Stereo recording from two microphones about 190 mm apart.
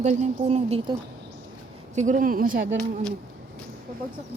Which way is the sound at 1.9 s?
40° right (ahead or behind).